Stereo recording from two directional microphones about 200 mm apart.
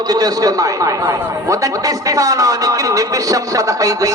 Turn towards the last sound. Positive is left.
turn(degrees=-15)  # may be behind; listen again after turning